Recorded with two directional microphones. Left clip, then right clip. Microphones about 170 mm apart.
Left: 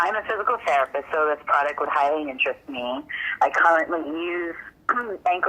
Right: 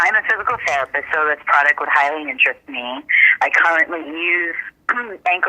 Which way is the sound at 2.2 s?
30° right (ahead or behind).